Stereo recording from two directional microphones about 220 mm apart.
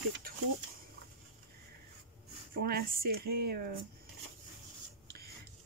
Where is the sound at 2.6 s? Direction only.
45° right (ahead or behind).